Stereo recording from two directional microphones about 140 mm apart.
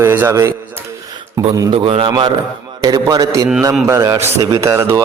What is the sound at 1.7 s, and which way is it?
A man's voice, 40° right (ahead or behind).